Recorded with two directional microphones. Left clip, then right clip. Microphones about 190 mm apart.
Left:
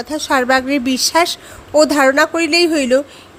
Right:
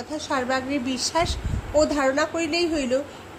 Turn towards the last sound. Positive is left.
turn(degrees=40)  # may be behind; listen again after turning